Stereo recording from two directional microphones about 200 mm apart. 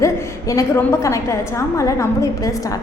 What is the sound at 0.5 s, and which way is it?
A woman's voice, 15° left (ahead or behind).